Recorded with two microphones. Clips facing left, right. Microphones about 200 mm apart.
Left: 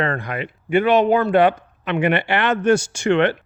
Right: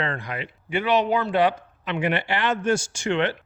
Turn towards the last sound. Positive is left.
turn(degrees=60)  # may be behind; listen again after turning